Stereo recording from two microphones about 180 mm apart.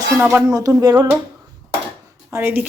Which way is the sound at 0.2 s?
15° right (ahead or behind).